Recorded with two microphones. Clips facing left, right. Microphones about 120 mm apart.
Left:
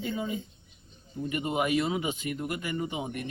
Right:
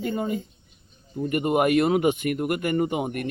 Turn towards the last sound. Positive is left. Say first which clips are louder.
# right 8 dB
turn(degrees=-60)  # may be behind; listen again after turning